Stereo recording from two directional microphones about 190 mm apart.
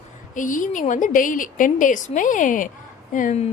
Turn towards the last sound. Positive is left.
turn(degrees=40)  # may be behind; listen again after turning